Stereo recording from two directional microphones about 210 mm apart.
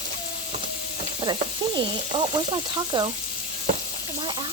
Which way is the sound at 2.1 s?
20° right (ahead or behind).